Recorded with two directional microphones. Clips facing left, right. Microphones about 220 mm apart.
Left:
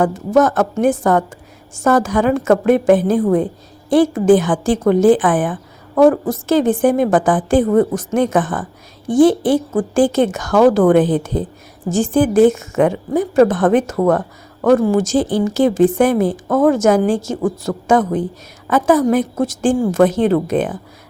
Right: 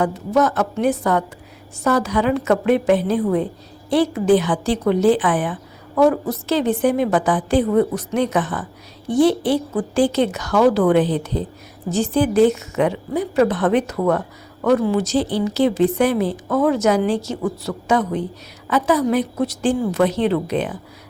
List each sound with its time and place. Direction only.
0.0 s a woman's voice: 50° left (ahead or behind)